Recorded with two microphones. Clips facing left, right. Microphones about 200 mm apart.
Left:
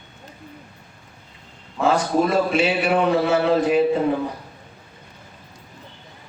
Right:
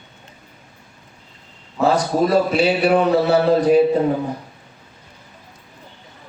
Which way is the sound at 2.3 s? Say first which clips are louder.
Right 3 dB; 35° right (ahead or behind).